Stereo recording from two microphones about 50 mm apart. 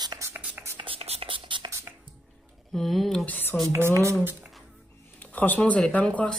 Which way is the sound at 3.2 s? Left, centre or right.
Left.